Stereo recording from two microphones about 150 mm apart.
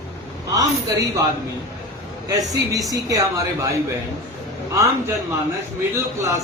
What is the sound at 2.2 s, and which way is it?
Speech, 20° right (ahead or behind).